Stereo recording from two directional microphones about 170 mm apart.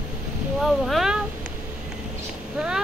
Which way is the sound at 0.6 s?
Centre (ahead or behind).